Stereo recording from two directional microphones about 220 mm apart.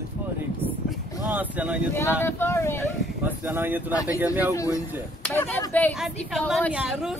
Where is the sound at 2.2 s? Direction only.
10° left (ahead or behind).